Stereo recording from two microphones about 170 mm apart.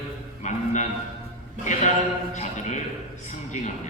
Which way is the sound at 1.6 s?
45° left (ahead or behind).